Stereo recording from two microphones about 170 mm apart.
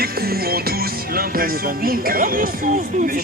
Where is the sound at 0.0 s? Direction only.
65° right (ahead or behind).